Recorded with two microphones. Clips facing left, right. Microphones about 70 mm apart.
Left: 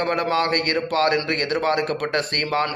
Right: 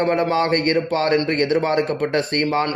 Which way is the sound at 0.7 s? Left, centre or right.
Left.